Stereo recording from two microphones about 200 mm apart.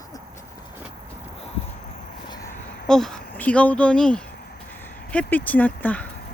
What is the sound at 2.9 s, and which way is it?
Speech, centre (ahead or behind).